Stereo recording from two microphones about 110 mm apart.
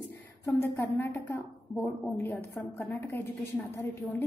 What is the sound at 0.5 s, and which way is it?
A woman's voice, 25° left (ahead or behind).